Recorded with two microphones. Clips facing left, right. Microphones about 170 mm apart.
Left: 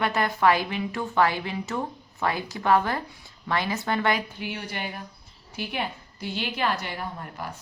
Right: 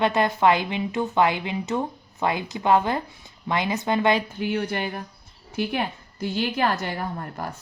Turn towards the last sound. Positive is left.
turn(degrees=-45)  # may be behind; listen again after turning